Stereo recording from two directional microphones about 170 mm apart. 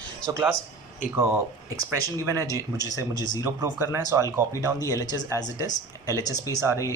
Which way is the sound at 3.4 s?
15° right (ahead or behind).